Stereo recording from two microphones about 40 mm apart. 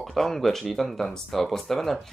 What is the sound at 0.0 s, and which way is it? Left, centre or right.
Speech, centre.